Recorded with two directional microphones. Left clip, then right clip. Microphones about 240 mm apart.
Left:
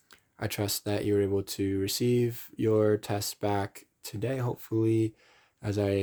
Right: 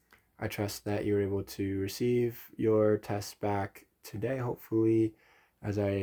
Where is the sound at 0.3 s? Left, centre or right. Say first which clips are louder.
Left 3 dB; left.